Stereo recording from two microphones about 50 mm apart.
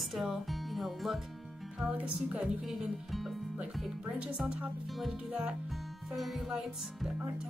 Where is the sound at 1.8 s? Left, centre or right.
Right.